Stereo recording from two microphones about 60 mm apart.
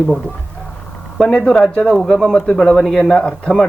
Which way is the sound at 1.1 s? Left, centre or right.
Centre.